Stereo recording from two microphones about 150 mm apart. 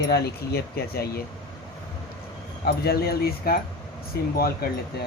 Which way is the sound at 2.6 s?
90° left.